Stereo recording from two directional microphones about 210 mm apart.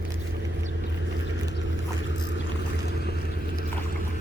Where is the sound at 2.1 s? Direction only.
60° left (ahead or behind).